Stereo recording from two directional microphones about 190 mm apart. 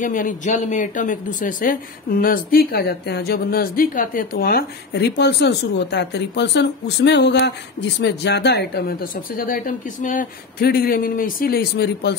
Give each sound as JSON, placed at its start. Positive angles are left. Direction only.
{"t": 0.0, "sound": "speech", "side_deg": 45}